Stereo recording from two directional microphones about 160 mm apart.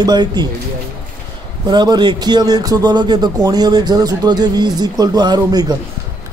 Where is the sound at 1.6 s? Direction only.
25° right (ahead or behind).